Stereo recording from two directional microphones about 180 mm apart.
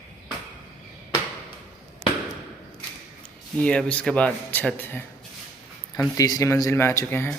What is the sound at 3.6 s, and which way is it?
Speech, 5° left (ahead or behind).